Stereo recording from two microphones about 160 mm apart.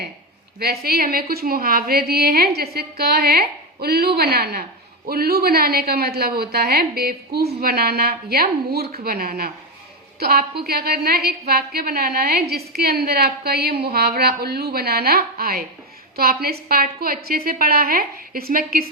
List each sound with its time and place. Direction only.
0.6 s a woman's voice: 80° right